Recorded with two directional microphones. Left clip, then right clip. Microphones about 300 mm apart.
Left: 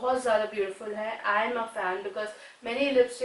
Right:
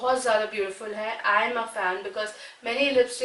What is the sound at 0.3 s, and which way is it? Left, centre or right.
A woman's voice, centre.